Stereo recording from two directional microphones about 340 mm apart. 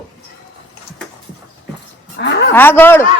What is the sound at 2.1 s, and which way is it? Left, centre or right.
Speech, left.